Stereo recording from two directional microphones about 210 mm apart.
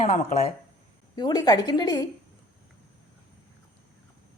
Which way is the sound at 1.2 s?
20° left (ahead or behind).